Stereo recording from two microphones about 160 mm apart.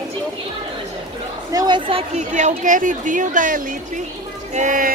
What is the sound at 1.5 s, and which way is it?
A woman's voice, 25° right (ahead or behind).